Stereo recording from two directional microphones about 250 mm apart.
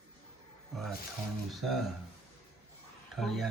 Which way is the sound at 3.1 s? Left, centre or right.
Centre.